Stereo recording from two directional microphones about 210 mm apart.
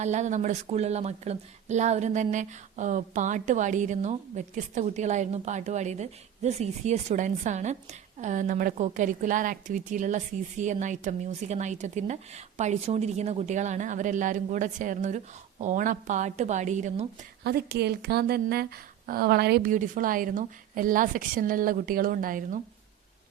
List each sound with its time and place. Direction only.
0.0 s speech: 35° right (ahead or behind)
17.4 s speech: 50° right (ahead or behind)